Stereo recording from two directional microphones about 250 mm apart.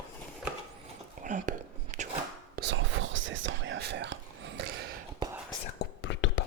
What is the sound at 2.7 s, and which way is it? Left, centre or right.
Whispering, right.